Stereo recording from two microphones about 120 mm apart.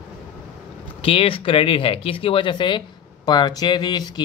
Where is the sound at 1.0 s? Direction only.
50° left (ahead or behind).